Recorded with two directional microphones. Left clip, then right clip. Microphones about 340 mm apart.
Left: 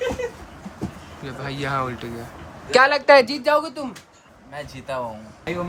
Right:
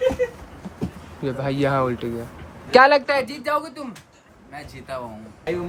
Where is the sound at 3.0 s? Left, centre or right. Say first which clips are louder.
Left 8 dB; centre.